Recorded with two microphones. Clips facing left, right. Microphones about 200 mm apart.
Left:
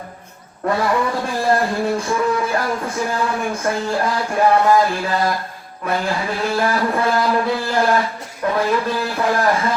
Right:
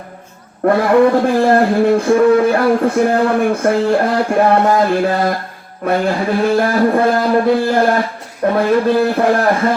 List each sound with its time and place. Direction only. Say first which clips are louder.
0.6 s a man's voice: right 9 dB; 60° right (ahead or behind)
5.8 s mantra: right 6 dB; 55° right (ahead or behind)
8.4 s a man's voice: right 6 dB; 55° right (ahead or behind)